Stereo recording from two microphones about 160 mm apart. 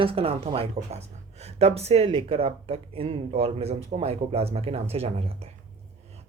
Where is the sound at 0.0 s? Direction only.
35° right (ahead or behind).